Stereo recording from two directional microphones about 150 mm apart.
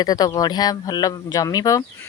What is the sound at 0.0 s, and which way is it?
Speech, 25° left (ahead or behind).